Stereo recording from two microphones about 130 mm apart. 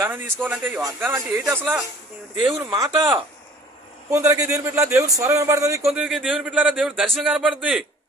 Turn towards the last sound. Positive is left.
turn(degrees=0)  # may be behind; listen again after turning